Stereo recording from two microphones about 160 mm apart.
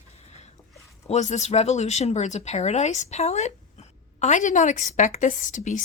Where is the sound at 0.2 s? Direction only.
40° left (ahead or behind).